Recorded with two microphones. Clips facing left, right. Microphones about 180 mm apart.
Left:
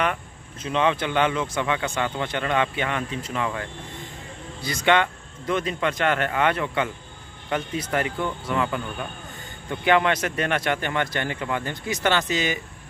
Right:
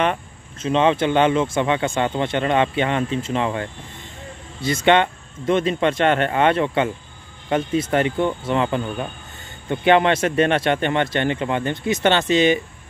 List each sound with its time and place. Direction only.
0.0 s speech: 25° right (ahead or behind)